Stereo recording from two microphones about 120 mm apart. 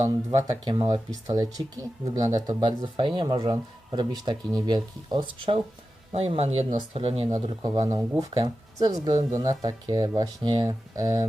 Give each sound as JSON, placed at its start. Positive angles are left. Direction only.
{"t": 0.1, "sound": "speech", "side_deg": -35}
{"t": 6.1, "sound": "speech", "side_deg": -55}
{"t": 7.4, "sound": "speech", "side_deg": -30}